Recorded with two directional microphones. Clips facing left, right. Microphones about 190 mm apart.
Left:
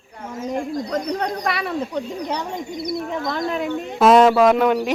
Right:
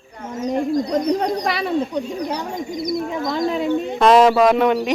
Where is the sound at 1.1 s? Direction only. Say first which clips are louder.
Right 4 dB; 30° right (ahead or behind).